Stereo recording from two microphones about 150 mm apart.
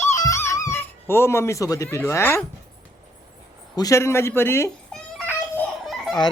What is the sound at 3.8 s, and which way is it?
Speech, 20° left (ahead or behind).